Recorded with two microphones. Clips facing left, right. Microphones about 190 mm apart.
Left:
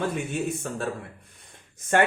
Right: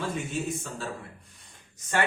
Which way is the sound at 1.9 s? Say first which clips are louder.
Left 6 dB; 55° left (ahead or behind).